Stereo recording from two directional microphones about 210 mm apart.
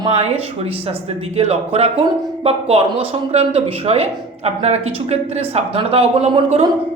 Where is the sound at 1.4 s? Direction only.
30° right (ahead or behind).